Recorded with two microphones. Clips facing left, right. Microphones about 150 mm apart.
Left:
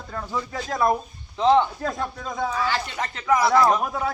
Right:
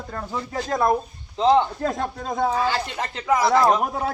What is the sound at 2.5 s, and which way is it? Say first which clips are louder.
Speech: right 3 dB; 30° right (ahead or behind).